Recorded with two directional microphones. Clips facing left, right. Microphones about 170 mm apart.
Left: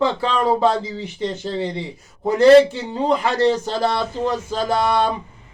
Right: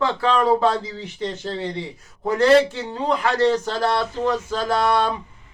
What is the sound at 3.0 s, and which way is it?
Speech, 25° left (ahead or behind).